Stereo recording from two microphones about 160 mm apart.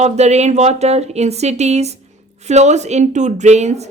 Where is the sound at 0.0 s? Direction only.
45° right (ahead or behind).